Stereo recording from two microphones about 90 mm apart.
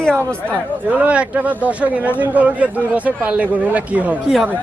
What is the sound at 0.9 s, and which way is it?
Speech, 15° right (ahead or behind).